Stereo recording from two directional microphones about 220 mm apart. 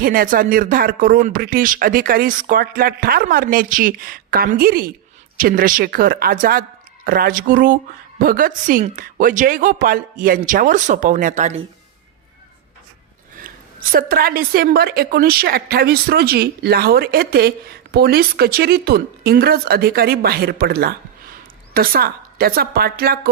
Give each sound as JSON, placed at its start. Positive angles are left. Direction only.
{"t": 0.0, "sound": "speech", "side_deg": -40}
{"t": 13.9, "sound": "a woman's voice", "side_deg": -40}